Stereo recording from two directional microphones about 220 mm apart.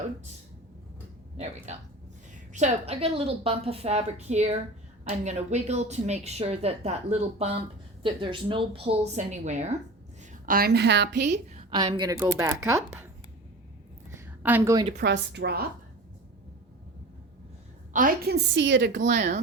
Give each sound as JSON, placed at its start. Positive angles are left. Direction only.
{"t": 1.7, "sound": "a woman's voice", "side_deg": -30}
{"t": 11.7, "sound": "speech", "side_deg": -20}
{"t": 14.1, "sound": "a sound", "side_deg": -10}
{"t": 15.0, "sound": "a woman's voice", "side_deg": -50}
{"t": 17.9, "sound": "a woman's voice", "side_deg": -40}
{"t": 19.0, "sound": "speech", "side_deg": -35}